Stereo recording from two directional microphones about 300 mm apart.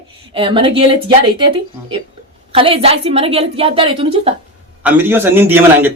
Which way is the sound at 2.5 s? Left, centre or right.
Centre.